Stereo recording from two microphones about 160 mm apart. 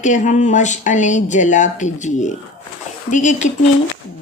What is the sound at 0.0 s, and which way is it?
Speech, 50° left (ahead or behind).